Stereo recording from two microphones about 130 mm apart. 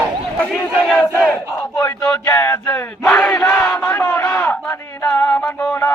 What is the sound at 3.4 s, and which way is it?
Crowd, 20° left (ahead or behind).